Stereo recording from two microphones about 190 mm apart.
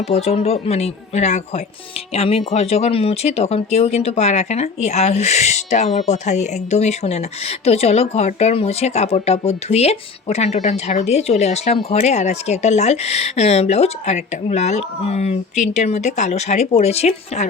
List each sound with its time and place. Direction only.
0.1 s speech: 35° left (ahead or behind)